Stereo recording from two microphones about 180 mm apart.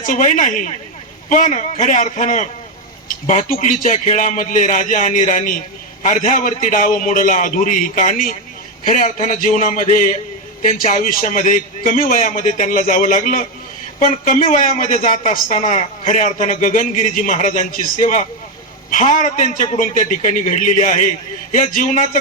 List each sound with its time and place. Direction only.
0.0 s a man's voice: 45° left (ahead or behind)